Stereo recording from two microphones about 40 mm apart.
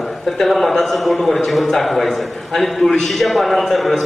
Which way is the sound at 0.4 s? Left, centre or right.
Centre.